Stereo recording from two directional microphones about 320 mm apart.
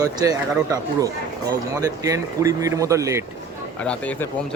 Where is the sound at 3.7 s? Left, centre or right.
Centre.